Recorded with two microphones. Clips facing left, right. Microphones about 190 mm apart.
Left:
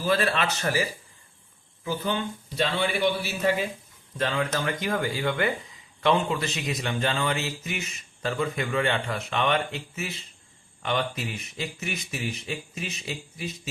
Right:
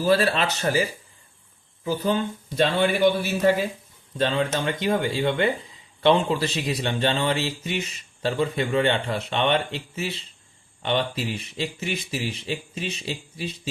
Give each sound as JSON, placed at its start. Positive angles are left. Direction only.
{"t": 0.0, "sound": "a man's voice", "side_deg": -35}
{"t": 4.2, "sound": "speech", "side_deg": -25}